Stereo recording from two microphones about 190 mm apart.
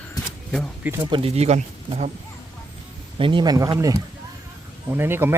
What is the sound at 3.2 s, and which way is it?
Speech, 25° right (ahead or behind).